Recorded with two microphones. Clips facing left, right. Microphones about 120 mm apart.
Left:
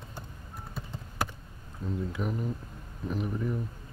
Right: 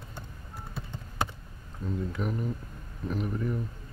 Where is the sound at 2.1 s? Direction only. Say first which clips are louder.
Right 1 dB; centre (ahead or behind).